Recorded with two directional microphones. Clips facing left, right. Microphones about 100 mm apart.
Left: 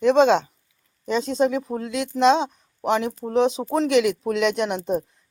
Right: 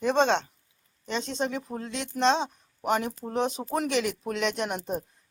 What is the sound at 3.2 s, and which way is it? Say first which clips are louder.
Speech: left 7 dB; 25° left (ahead or behind).